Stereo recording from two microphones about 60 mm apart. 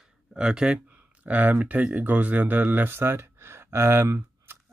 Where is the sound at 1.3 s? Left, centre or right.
Right.